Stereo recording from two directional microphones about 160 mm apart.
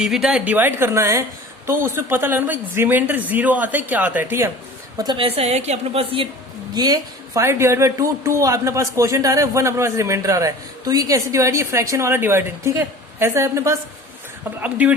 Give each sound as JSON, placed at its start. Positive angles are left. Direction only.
{"t": 0.0, "sound": "speech", "side_deg": -5}
{"t": 4.9, "sound": "a woman's voice", "side_deg": -30}
{"t": 6.7, "sound": "speech", "side_deg": -25}